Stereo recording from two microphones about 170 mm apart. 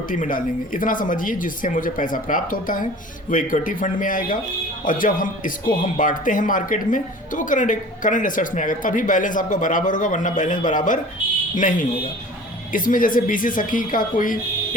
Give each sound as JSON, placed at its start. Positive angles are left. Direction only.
{"t": 0.1, "sound": "speech", "side_deg": 50}